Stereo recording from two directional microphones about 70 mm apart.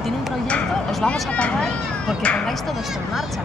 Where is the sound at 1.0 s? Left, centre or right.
Centre.